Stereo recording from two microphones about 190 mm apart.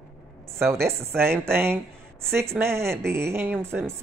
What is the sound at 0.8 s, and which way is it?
Speech, 15° right (ahead or behind).